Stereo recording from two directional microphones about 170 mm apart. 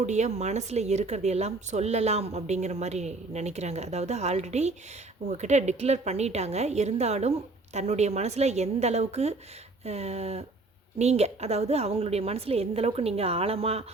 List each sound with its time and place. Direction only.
0.0 s a woman's voice: 45° right (ahead or behind)